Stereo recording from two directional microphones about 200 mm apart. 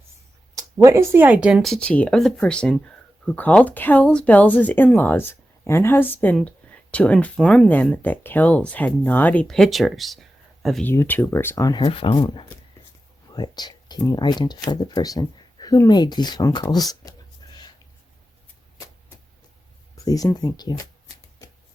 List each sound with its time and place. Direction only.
0.5 s speech: 15° right (ahead or behind); by 16.8 s 20° left (ahead or behind)
17.4 s a sound: 20° left (ahead or behind)
20.1 s speech: 20° left (ahead or behind)